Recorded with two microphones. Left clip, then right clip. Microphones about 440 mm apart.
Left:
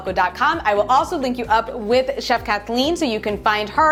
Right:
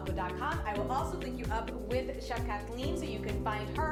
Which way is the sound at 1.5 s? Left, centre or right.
Left.